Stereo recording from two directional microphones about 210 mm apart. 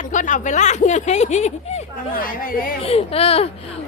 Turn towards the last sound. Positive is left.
turn(degrees=30)  # may be behind; listen again after turning